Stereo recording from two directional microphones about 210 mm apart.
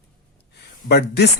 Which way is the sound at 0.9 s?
50° left (ahead or behind).